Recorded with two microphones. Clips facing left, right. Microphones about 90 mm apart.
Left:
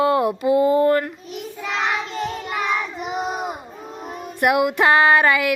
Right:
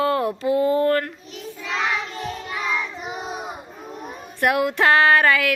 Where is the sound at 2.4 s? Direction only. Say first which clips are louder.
Left 1 dB; 60° left (ahead or behind).